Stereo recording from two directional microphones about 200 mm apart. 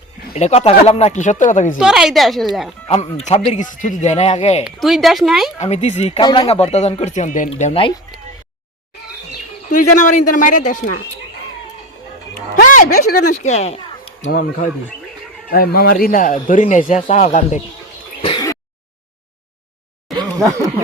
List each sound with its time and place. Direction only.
0.3 s speech: 30° left (ahead or behind)
1.8 s a woman's voice: 5° right (ahead or behind)
2.9 s speech: 30° left (ahead or behind)
4.6 s a woman's voice: centre (ahead or behind)
5.5 s speech: 35° left (ahead or behind)
9.6 s speech: 40° left (ahead or behind)
12.6 s a sound: 40° left (ahead or behind)
13.1 s speech: 40° left (ahead or behind)
14.3 s speech: 45° left (ahead or behind)
18.2 s a sound: 20° left (ahead or behind)
20.1 s a sound: 15° right (ahead or behind)